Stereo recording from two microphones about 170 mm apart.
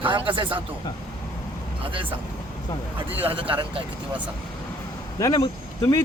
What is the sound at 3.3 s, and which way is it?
Speech, 30° right (ahead or behind).